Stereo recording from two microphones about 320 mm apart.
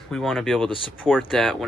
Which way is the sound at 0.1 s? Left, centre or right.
Centre.